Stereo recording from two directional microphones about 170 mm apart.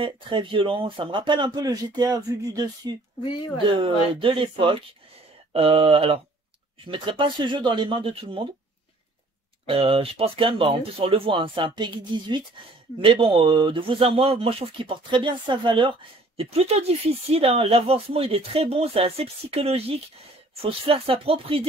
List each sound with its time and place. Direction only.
0.0 s speech: 30° right (ahead or behind)
3.2 s speech: 25° left (ahead or behind)
3.7 s speech: 30° right (ahead or behind)
9.7 s speech: 35° right (ahead or behind)